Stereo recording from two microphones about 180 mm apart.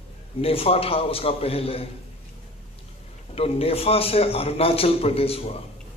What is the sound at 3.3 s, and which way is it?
A man's voice, 35° left (ahead or behind).